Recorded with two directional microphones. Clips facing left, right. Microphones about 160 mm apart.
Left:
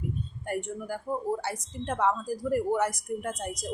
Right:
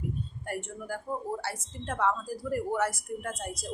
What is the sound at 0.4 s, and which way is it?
Speech, 20° left (ahead or behind).